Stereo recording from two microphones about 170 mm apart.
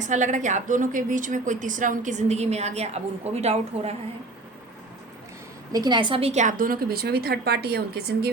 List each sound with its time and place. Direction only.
0.0 s a woman's voice: 45° right (ahead or behind)
5.7 s a woman's voice: 25° right (ahead or behind); by 8.3 s 70° right (ahead or behind)